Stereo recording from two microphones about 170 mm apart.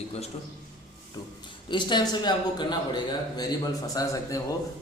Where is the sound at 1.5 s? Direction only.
25° left (ahead or behind).